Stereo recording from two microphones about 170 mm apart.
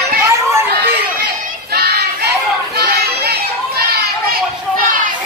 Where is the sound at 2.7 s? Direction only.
70° right (ahead or behind).